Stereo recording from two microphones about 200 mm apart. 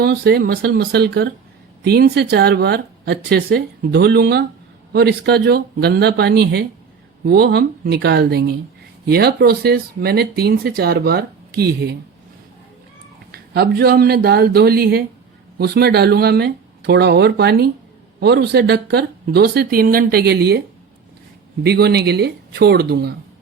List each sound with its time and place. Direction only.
0.0 s speech: 55° right (ahead or behind)
13.3 s speech: 50° right (ahead or behind)
21.6 s speech: 55° right (ahead or behind)